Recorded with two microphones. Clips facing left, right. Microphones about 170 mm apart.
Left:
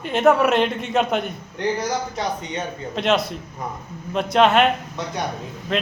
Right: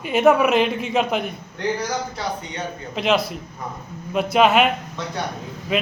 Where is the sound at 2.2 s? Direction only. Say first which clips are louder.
Left 2 dB; 20° left (ahead or behind).